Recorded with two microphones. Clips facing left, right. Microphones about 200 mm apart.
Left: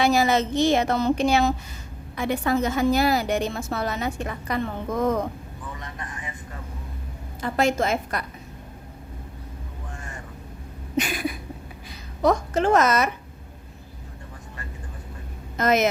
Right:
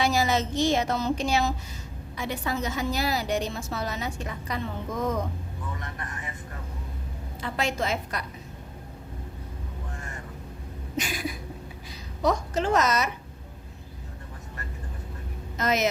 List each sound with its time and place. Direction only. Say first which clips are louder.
0.0 s a woman's voice: left 4 dB; 60° left (ahead or behind)
7.4 s a woman's voice: left 6 dB; 45° left (ahead or behind)
10.9 s a woman's voice: left 5 dB; 60° left (ahead or behind)
15.5 s a woman's voice: left 5 dB; 55° left (ahead or behind)